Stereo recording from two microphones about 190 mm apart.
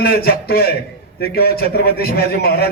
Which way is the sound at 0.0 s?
55° left (ahead or behind).